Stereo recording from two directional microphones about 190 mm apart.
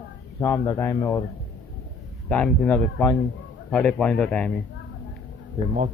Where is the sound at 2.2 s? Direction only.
5° left (ahead or behind).